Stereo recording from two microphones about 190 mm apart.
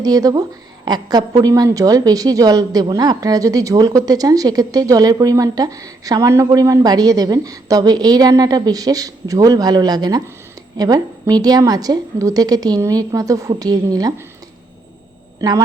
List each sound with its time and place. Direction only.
0.0 s a woman's voice: 20° right (ahead or behind)
15.4 s speech: 15° right (ahead or behind)